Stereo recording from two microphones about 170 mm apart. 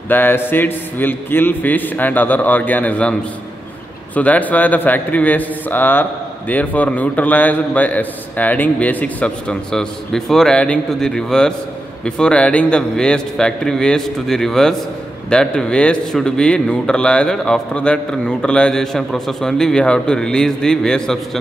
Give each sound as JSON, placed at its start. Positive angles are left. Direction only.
{"t": 0.1, "sound": "a man's voice", "side_deg": 10}